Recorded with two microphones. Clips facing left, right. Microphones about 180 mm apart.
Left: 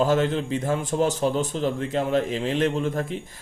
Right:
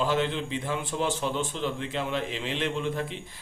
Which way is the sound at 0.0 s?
45° left (ahead or behind).